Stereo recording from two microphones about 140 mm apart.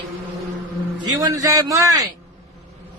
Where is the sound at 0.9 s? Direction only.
25° right (ahead or behind).